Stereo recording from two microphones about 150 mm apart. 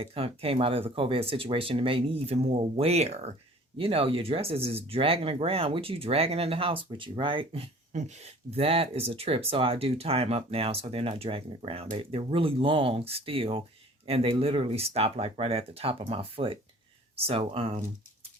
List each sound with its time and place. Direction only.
0.0 s speech: 40° right (ahead or behind)